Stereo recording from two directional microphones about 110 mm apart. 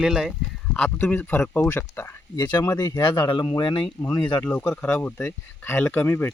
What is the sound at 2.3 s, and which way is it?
Speech, 35° left (ahead or behind).